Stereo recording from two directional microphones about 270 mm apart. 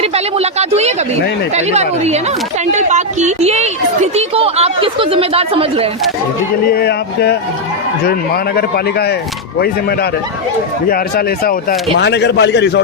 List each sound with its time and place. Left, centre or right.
0.0 s a woman's voice: right
6.7 s a man's voice: left
8.5 s a man's voice: left
11.9 s a man's voice: left